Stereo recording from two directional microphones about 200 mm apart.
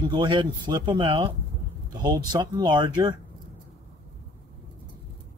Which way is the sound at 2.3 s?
20° right (ahead or behind).